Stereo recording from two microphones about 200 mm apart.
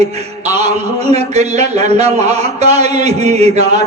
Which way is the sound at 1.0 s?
30° right (ahead or behind).